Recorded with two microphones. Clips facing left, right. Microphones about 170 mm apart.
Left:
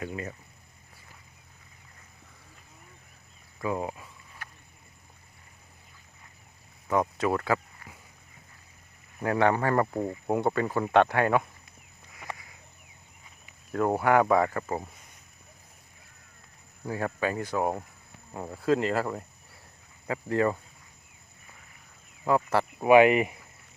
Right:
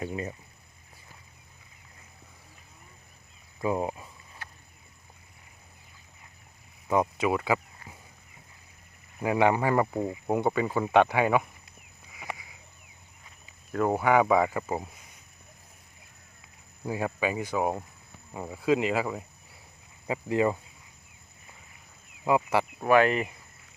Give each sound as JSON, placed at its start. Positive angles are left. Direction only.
{"t": 3.6, "sound": "a sound", "side_deg": -20}
{"t": 6.8, "sound": "speech", "side_deg": -15}
{"t": 9.2, "sound": "speech", "side_deg": -10}
{"t": 13.7, "sound": "speech", "side_deg": 0}
{"t": 16.8, "sound": "speech", "side_deg": -10}
{"t": 20.1, "sound": "speech", "side_deg": -15}
{"t": 22.2, "sound": "speech", "side_deg": -10}
{"t": 22.8, "sound": "speech", "side_deg": 15}